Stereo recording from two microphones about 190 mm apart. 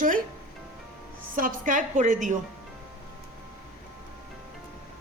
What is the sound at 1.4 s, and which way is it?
Speech, 45° right (ahead or behind).